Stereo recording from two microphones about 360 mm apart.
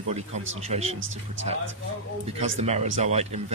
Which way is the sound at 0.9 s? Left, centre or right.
Right.